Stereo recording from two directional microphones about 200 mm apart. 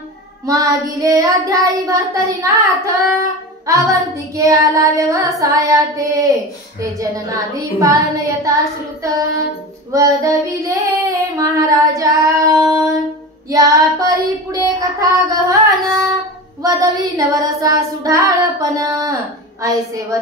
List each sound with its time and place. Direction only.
0.5 s child singing: 15° right (ahead or behind)